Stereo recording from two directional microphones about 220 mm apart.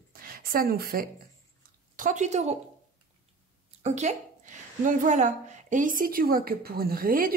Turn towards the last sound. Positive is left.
turn(degrees=-40)  # may be behind; listen again after turning